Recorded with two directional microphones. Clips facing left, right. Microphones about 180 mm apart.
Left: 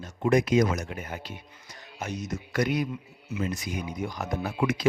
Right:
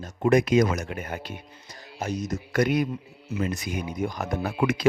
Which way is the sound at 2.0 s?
40° right (ahead or behind).